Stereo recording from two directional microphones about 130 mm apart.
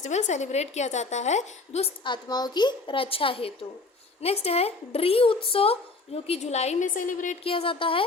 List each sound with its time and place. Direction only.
0.0 s a woman's voice: 65° left (ahead or behind)
2.0 s a woman's voice: 35° left (ahead or behind); by 7.3 s 85° left
7.4 s speech: 45° left (ahead or behind)